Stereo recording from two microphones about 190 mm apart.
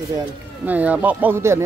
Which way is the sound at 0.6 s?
10° right (ahead or behind).